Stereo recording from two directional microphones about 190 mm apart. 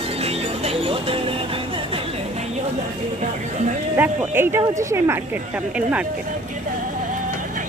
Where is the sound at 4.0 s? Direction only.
10° right (ahead or behind).